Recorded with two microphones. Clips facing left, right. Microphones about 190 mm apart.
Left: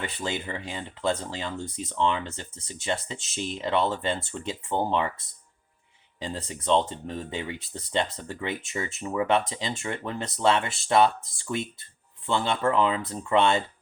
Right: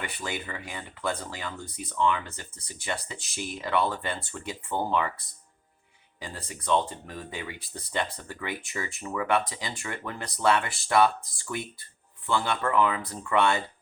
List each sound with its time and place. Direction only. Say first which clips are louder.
0.0 s speech: left 3 dB; 25° left (ahead or behind)
6.1 s speech: left 6 dB; 25° left (ahead or behind)